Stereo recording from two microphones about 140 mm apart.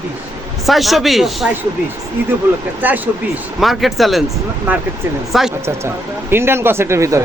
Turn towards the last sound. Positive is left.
turn(degrees=-20)  # may be behind; listen again after turning